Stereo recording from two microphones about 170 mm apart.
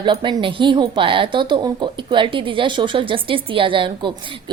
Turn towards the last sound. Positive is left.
turn(degrees=-30)  # may be behind; listen again after turning